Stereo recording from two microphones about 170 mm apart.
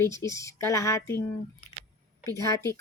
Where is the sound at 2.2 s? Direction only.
20° left (ahead or behind).